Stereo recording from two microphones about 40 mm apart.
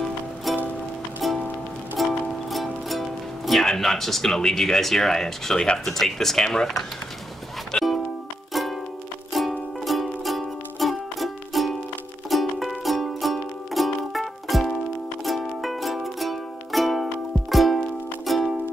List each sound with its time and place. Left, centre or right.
0.5 s music: centre
4.3 s speech: centre
7.7 s music: left
8.5 s music: centre